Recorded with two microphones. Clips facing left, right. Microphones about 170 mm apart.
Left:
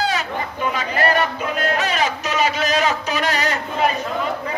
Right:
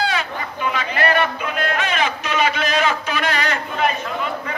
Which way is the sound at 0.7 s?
40° left (ahead or behind).